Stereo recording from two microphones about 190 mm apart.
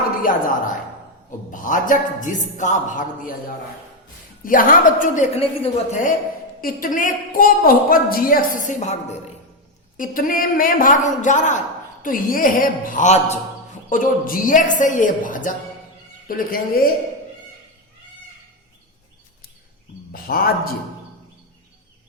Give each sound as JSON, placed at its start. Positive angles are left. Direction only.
{"t": 0.2, "sound": "a woman's voice", "side_deg": 45}
{"t": 4.4, "sound": "a woman's voice", "side_deg": 45}
{"t": 6.6, "sound": "a woman's voice", "side_deg": 45}
{"t": 10.0, "sound": "a woman's voice", "side_deg": 45}
{"t": 20.2, "sound": "a man's voice", "side_deg": 50}